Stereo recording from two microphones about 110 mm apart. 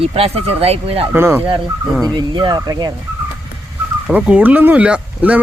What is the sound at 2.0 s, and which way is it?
Speech, 40° right (ahead or behind).